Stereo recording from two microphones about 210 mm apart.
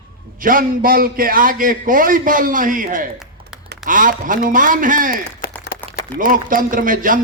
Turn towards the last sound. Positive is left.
turn(degrees=-40)  # may be behind; listen again after turning